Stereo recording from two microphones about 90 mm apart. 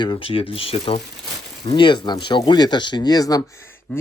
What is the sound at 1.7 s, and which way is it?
Speech, 60° left (ahead or behind).